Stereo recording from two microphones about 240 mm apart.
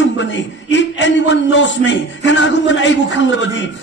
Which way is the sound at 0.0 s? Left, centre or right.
Left.